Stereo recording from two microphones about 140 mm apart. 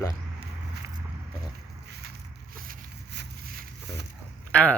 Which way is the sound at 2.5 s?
90° right.